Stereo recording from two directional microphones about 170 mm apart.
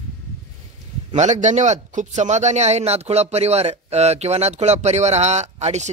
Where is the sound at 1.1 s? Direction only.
45° right (ahead or behind).